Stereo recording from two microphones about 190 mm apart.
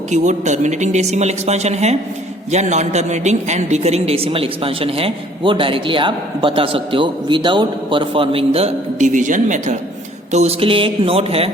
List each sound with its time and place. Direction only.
0.1 s a woman's voice: 40° right (ahead or behind)